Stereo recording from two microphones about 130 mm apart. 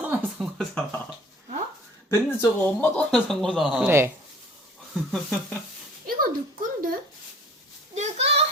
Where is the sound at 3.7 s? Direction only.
15° right (ahead or behind).